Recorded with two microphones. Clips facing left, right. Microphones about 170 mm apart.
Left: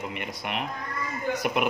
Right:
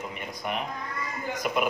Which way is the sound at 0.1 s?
75° left (ahead or behind).